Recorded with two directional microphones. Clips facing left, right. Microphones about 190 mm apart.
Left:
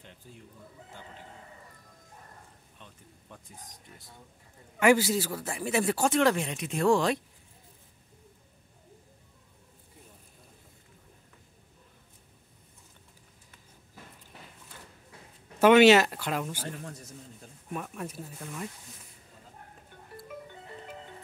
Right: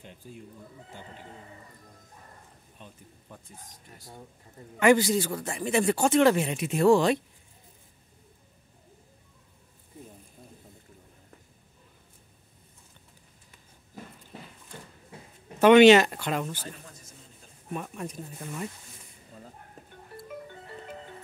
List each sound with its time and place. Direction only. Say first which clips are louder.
4.7 s a man's voice: right 2 dB; 5° left (ahead or behind)
15.6 s a man's voice: right 3 dB; 5° left (ahead or behind)
16.6 s a man's voice: left 4 dB; 65° left (ahead or behind)
17.7 s speech: right 1 dB; centre (ahead or behind)
18.3 s speech: right 3 dB; 5° right (ahead or behind)